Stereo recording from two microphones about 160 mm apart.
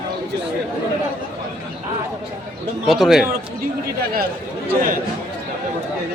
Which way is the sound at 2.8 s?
Centre (ahead or behind).